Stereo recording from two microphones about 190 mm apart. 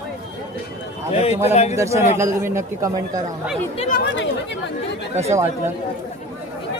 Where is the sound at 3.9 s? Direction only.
60° left (ahead or behind).